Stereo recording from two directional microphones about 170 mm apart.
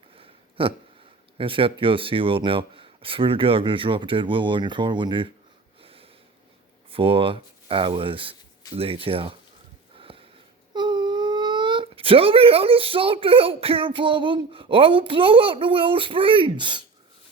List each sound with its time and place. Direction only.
0.2 s a sound: 30° right (ahead or behind)
1.4 s speech: 30° right (ahead or behind)
5.8 s sniff: 35° right (ahead or behind)
6.9 s speech: 35° right (ahead or behind)
10.1 s sniff: 35° right (ahead or behind)
10.8 s speech: 25° right (ahead or behind)